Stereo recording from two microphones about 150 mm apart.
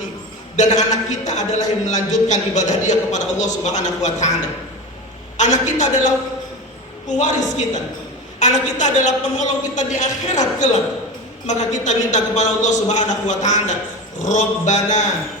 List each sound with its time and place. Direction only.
0.5 s a man's voice: 50° left (ahead or behind)
5.4 s a man's voice: 55° left (ahead or behind)
7.2 s a man's voice: 55° left (ahead or behind)